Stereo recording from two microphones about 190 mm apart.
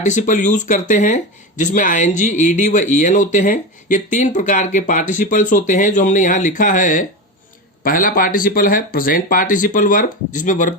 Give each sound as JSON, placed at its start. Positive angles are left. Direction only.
{"t": 0.0, "sound": "speech", "side_deg": 40}